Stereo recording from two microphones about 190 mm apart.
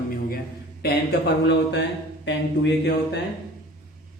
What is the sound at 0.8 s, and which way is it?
A man's voice, 60° left (ahead or behind).